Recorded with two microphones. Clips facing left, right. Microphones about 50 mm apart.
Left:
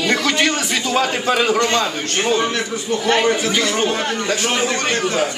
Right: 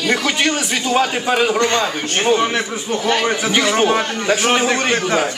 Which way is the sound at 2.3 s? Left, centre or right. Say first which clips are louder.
Right 1 dB; centre.